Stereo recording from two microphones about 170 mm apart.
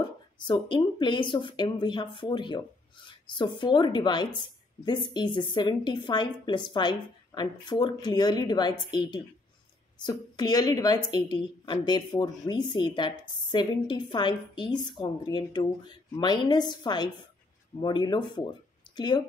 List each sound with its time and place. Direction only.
0.4 s a woman's voice: 30° left (ahead or behind)
10.0 s a woman's voice: 25° left (ahead or behind)